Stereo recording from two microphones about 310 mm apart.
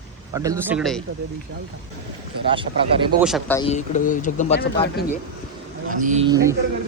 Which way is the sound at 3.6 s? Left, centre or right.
Left.